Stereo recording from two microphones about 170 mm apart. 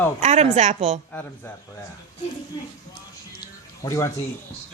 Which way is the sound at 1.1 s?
10° left (ahead or behind).